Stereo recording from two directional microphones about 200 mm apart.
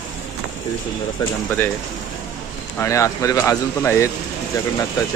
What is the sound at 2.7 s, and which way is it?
Speech, 15° left (ahead or behind).